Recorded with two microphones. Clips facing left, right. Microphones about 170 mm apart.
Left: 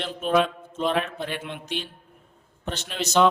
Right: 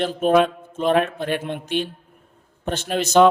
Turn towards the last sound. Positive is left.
turn(degrees=-50)  # may be behind; listen again after turning